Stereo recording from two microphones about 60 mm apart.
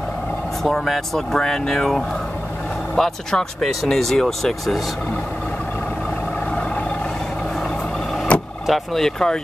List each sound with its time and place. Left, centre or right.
0.7 s speech: centre
8.3 s vehicle: centre
8.6 s speech: centre